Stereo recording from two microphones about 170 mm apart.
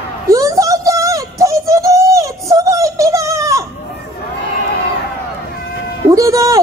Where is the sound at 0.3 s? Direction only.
20° right (ahead or behind).